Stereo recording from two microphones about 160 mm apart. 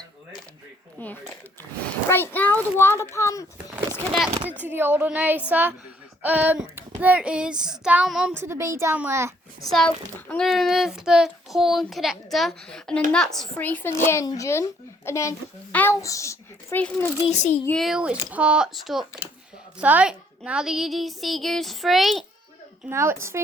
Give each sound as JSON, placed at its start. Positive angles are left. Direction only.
{"t": 0.9, "sound": "speech", "side_deg": 10}
{"t": 4.6, "sound": "child singing", "side_deg": -15}
{"t": 8.4, "sound": "child singing", "side_deg": -15}
{"t": 9.6, "sound": "child singing", "side_deg": 0}
{"t": 13.1, "sound": "speech", "side_deg": 5}
{"t": 17.2, "sound": "a child's voice", "side_deg": 45}
{"t": 17.7, "sound": "child singing", "side_deg": 0}
{"t": 22.9, "sound": "child singing", "side_deg": -15}